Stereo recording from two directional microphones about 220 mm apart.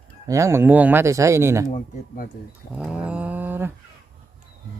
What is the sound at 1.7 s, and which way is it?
Speech, 40° left (ahead or behind).